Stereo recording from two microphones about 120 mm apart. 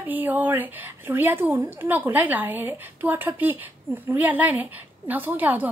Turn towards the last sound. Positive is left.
turn(degrees=-15)  # may be behind; listen again after turning